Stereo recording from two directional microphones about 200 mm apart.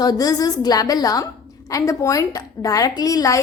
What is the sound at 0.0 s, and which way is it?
A woman's voice, 20° left (ahead or behind).